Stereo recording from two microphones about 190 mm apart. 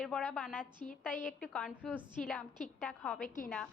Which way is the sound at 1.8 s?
5° right (ahead or behind).